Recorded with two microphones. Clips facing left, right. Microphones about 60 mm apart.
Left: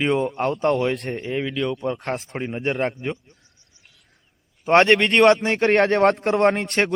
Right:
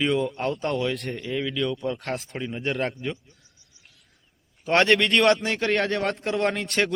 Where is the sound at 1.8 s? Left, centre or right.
Left.